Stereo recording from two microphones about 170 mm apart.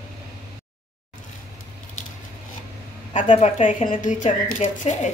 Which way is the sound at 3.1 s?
40° left (ahead or behind).